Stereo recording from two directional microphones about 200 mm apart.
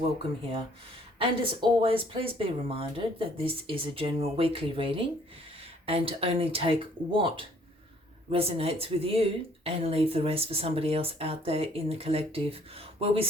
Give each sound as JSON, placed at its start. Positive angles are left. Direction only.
{"t": 1.2, "sound": "speech", "side_deg": -25}